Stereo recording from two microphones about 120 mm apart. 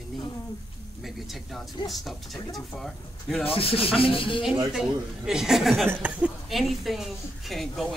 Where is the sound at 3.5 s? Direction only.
50° left (ahead or behind).